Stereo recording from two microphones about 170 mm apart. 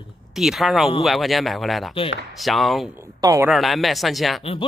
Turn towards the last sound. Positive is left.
turn(degrees=0)  # may be behind; listen again after turning